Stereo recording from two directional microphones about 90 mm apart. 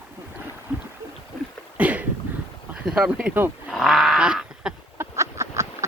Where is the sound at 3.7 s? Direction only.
Centre (ahead or behind).